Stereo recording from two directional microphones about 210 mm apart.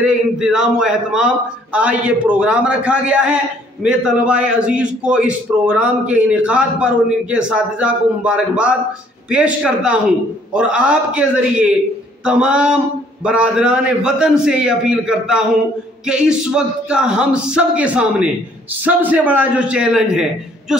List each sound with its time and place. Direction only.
0.0 s a man's voice: 5° right (ahead or behind)